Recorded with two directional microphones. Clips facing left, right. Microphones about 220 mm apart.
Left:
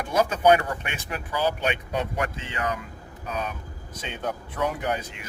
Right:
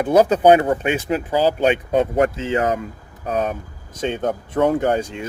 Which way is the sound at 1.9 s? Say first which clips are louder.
Right 11 dB; 35° right (ahead or behind).